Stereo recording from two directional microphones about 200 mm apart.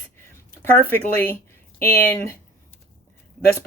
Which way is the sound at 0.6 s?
10° left (ahead or behind).